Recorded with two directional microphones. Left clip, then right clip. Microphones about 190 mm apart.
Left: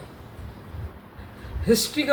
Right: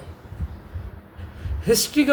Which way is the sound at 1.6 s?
55° right (ahead or behind).